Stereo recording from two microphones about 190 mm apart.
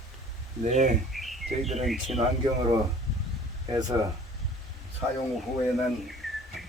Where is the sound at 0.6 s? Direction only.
40° right (ahead or behind).